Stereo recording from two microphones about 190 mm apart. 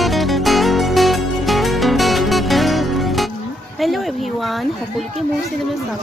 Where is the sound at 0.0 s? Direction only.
Centre (ahead or behind).